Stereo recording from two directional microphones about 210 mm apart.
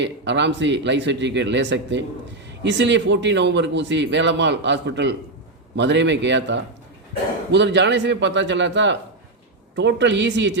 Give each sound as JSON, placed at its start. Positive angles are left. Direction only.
{"t": 0.0, "sound": "speech", "side_deg": -55}